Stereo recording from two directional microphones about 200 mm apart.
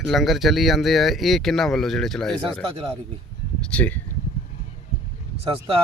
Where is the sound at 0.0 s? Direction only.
Centre (ahead or behind).